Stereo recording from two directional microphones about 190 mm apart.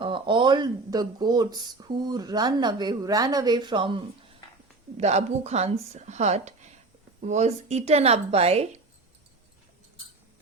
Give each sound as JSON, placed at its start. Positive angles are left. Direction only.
{"t": 0.0, "sound": "a woman's voice", "side_deg": -25}